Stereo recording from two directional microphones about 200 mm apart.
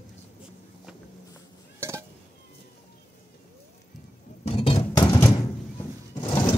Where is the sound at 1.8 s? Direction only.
15° right (ahead or behind).